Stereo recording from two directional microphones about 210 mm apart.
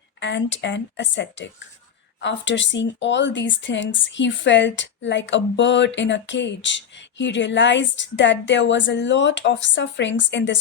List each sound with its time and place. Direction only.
0.2 s speech: 60° left (ahead or behind)